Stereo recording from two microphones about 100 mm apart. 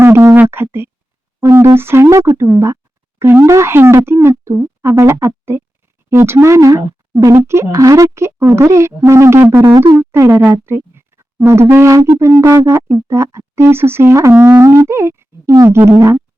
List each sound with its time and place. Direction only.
0.0 s a sound: 25° right (ahead or behind)
1.7 s speech: 25° right (ahead or behind)
10.0 s music: 25° right (ahead or behind)
10.4 s speech: 25° right (ahead or behind)